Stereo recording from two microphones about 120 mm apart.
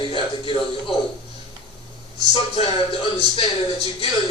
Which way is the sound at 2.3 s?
50° left (ahead or behind).